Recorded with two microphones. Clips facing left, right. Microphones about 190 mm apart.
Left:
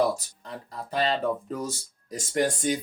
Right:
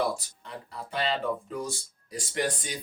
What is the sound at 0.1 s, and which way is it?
Speech, 40° left (ahead or behind).